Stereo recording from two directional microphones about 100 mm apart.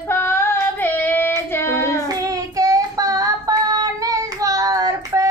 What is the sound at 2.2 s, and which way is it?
Child singing, 35° right (ahead or behind).